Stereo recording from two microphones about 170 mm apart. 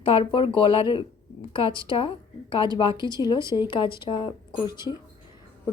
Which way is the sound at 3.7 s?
30° left (ahead or behind).